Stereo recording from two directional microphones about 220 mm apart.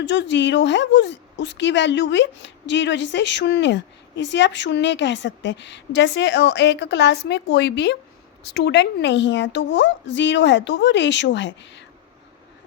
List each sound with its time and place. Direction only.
0.0 s a woman's voice: 55° left (ahead or behind)